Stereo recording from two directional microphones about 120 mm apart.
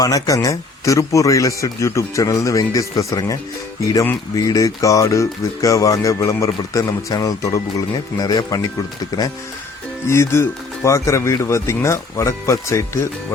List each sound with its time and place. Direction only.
0.0 s speech: 30° left (ahead or behind)
4.4 s speech: 30° left (ahead or behind)
10.1 s speech: 20° left (ahead or behind)